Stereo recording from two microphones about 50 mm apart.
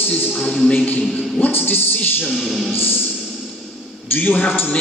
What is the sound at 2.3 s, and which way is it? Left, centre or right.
Music, centre.